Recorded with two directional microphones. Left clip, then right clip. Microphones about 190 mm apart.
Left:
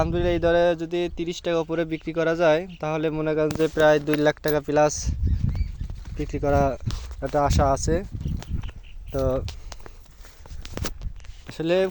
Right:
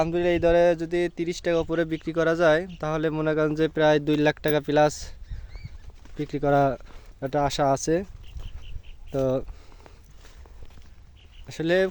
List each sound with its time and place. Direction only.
0.0 s speech: 10° right (ahead or behind)
6.1 s speech: 15° right (ahead or behind)
7.9 s speech: 35° right (ahead or behind)
9.1 s speech: 25° right (ahead or behind)
11.4 s speech: 10° right (ahead or behind)